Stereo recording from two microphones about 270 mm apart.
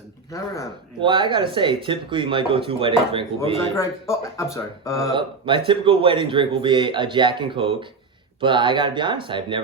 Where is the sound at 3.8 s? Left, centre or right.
Centre.